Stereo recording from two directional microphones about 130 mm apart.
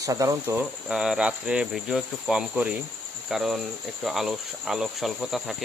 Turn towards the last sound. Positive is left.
turn(degrees=0)  # may be behind; listen again after turning